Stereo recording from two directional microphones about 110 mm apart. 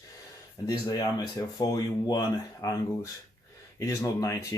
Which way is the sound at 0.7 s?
35° left (ahead or behind).